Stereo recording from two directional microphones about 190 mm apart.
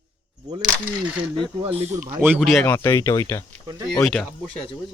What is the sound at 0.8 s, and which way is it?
Speech, 5° right (ahead or behind).